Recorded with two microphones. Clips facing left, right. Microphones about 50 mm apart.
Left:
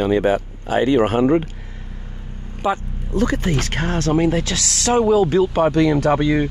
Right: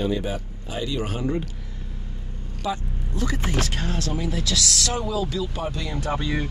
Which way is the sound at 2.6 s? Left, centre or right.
Left.